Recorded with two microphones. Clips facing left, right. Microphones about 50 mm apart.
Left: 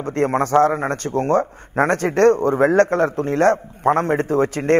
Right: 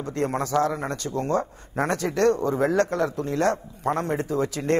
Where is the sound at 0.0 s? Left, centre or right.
Left.